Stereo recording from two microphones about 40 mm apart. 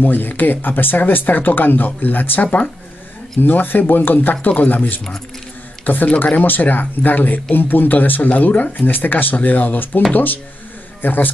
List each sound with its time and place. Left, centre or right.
0.0 s speech: left